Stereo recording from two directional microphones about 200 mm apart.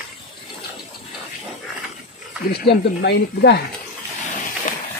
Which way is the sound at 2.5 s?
55° left (ahead or behind).